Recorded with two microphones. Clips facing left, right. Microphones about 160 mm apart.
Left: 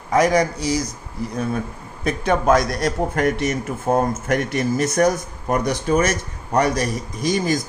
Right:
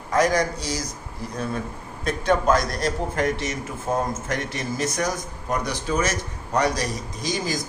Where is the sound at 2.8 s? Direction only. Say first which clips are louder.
Left 4 dB; 60° left (ahead or behind).